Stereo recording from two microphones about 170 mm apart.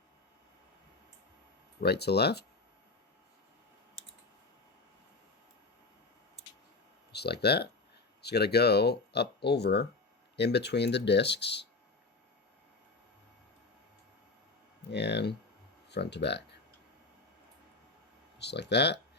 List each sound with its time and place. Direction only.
1.8 s speech: 70° left (ahead or behind)
7.1 s speech: 75° left (ahead or behind)
14.8 s speech: 85° left
18.3 s speech: 85° left